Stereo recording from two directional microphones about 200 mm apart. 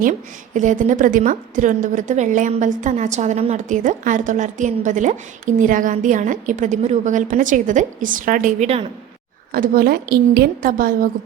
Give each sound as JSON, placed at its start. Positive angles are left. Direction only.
{"t": 0.0, "sound": "a woman's voice", "side_deg": -40}
{"t": 9.5, "sound": "a woman's voice", "side_deg": -45}